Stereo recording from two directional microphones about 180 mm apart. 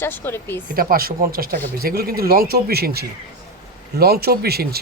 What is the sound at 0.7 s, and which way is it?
Speech, 55° right (ahead or behind).